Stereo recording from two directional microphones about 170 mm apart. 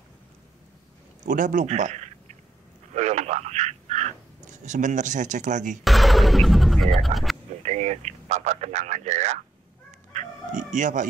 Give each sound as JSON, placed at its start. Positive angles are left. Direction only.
{"t": 1.2, "sound": "speech", "side_deg": -50}
{"t": 5.9, "sound": "speech", "side_deg": 0}
{"t": 7.6, "sound": "speech", "side_deg": -40}
{"t": 9.8, "sound": "chicken", "side_deg": -45}